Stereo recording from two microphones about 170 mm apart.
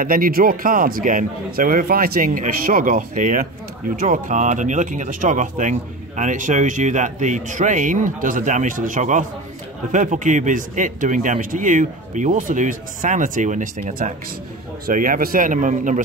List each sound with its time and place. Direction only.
0.0 s a man's voice: 55° right (ahead or behind)